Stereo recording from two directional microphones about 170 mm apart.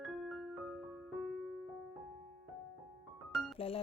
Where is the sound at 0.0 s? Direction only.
Centre (ahead or behind).